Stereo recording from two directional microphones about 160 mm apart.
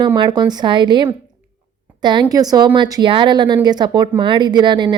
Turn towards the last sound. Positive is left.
turn(degrees=-30)  # may be behind; listen again after turning